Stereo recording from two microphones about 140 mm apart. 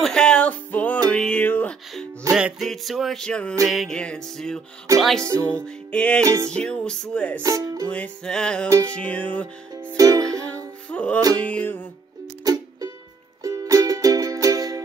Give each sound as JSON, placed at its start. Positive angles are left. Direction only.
{"t": 0.0, "sound": "music", "side_deg": 5}
{"t": 2.3, "sound": "music", "side_deg": 0}
{"t": 4.9, "sound": "music", "side_deg": -25}
{"t": 5.5, "sound": "music", "side_deg": 10}
{"t": 6.2, "sound": "music", "side_deg": -20}
{"t": 6.5, "sound": "music", "side_deg": 5}
{"t": 7.4, "sound": "music", "side_deg": -25}
{"t": 7.9, "sound": "music", "side_deg": 5}
{"t": 8.6, "sound": "music", "side_deg": -25}
{"t": 8.9, "sound": "music", "side_deg": 10}
{"t": 9.8, "sound": "music", "side_deg": -20}
{"t": 10.4, "sound": "music", "side_deg": 10}
{"t": 12.4, "sound": "music", "side_deg": -25}